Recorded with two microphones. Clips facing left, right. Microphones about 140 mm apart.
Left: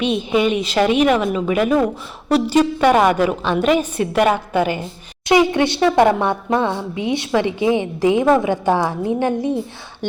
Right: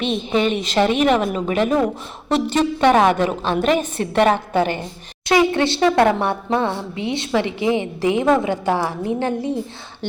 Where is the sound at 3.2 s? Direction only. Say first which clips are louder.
Left 2 dB; 40° right (ahead or behind).